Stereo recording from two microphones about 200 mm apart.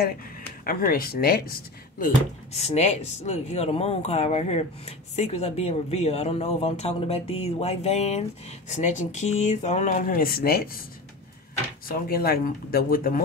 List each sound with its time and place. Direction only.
0.0 s speech: 45° left (ahead or behind)
11.9 s speech: 50° left (ahead or behind)